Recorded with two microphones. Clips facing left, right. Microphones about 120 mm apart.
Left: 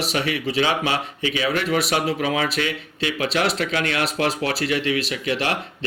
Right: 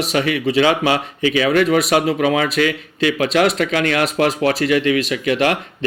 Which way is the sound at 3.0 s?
35° left (ahead or behind).